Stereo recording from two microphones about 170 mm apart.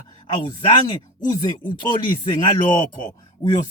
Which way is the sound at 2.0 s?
30° left (ahead or behind).